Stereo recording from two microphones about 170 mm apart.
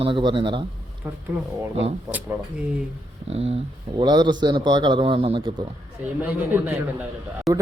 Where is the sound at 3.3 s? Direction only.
35° right (ahead or behind).